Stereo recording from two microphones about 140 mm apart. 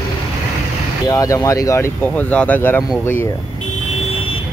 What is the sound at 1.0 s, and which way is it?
Speech, 25° left (ahead or behind).